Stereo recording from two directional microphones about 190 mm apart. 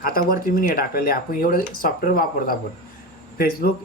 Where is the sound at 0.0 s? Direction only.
50° left (ahead or behind).